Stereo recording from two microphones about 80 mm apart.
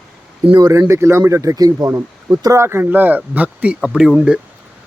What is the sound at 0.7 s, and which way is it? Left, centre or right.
Speech, right.